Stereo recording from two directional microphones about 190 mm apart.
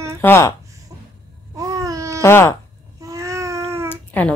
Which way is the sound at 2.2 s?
15° left (ahead or behind).